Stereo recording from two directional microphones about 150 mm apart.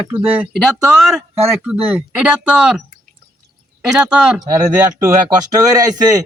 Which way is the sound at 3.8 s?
5° right (ahead or behind).